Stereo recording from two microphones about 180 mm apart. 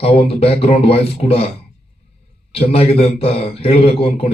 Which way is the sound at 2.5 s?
35° left (ahead or behind).